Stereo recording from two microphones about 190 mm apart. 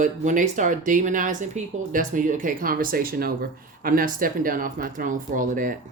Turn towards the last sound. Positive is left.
turn(degrees=-45)  # may be behind; listen again after turning